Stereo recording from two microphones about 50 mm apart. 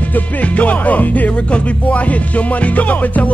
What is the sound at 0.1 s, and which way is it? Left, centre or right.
Music, left.